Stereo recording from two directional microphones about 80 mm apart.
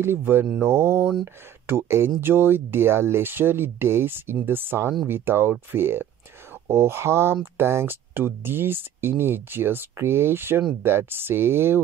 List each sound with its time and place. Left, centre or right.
0.0 s speech: right